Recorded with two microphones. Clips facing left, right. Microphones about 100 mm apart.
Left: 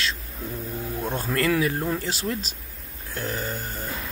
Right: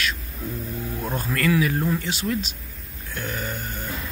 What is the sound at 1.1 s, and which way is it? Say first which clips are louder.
Speech: right 1 dB; 30° left (ahead or behind).